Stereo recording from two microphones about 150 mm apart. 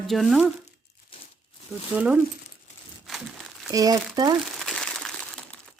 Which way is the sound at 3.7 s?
25° right (ahead or behind).